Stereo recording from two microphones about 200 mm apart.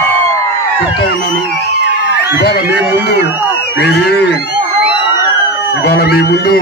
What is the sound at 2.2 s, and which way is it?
A man's voice, 55° left (ahead or behind).